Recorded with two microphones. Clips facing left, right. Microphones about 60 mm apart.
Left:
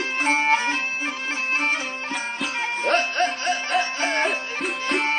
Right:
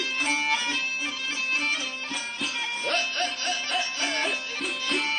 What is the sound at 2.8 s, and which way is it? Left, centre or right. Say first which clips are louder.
Music: left 8 dB; left.